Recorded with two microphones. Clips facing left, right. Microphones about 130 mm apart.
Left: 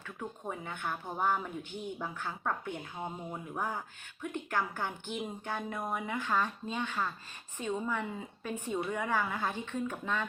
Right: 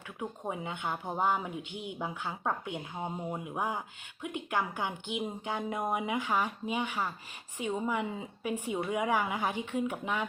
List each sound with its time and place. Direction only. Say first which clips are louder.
0.2 s speech: right 4 dB; 20° right (ahead or behind)